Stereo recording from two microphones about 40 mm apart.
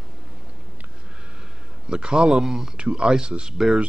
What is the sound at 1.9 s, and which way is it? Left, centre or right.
Speech, right.